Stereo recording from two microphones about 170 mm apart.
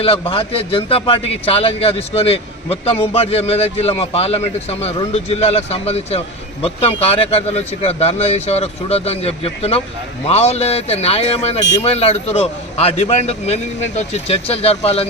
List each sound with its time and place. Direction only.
0.0 s speech: 35° left (ahead or behind)